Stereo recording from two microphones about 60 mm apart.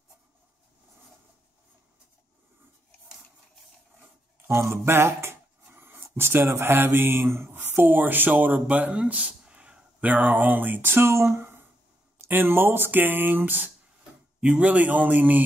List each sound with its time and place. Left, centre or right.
4.5 s a sound: right
6.0 s mantra: right
14.4 s a man's voice: right